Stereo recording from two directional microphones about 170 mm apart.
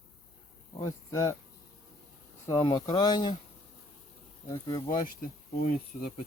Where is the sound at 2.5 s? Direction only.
25° left (ahead or behind).